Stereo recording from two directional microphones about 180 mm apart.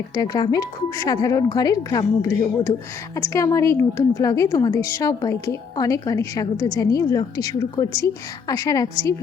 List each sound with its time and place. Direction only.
0.1 s a woman's voice: 20° left (ahead or behind)